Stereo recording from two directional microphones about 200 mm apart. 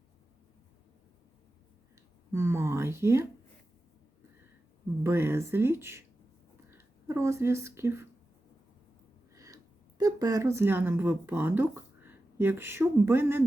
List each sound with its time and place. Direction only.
2.3 s speech: 15° right (ahead or behind)
5.0 s speech: 10° right (ahead or behind)
9.3 s a sound: 15° right (ahead or behind)
10.0 s speech: 15° right (ahead or behind)